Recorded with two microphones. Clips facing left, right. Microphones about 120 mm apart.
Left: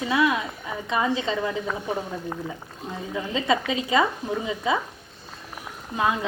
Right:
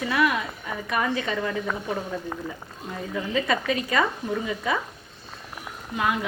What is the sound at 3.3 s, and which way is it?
A woman's voice, 20° left (ahead or behind).